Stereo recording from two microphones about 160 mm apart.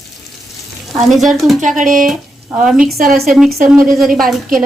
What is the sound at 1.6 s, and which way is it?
Speech, 55° right (ahead or behind).